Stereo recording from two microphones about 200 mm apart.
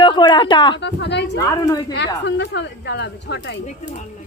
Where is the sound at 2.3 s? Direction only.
60° left (ahead or behind).